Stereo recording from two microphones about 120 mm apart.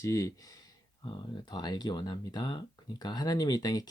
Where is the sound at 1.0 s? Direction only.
45° left (ahead or behind).